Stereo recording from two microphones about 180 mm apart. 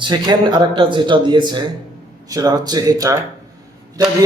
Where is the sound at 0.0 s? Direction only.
25° right (ahead or behind).